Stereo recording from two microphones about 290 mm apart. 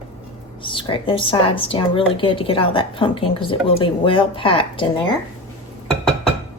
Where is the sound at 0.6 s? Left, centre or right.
Centre.